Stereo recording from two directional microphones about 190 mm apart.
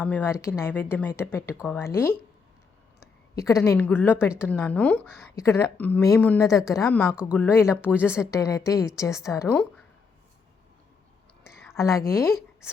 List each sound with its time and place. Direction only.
0.0 s a woman's voice: 10° left (ahead or behind)
11.7 s a woman's voice: 15° left (ahead or behind)